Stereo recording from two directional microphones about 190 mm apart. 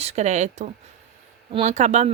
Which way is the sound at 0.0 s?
35° right (ahead or behind).